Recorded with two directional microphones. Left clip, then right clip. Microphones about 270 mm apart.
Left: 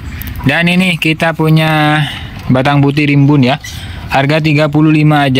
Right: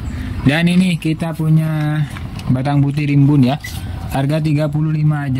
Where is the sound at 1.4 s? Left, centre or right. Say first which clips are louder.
Left 11 dB; left.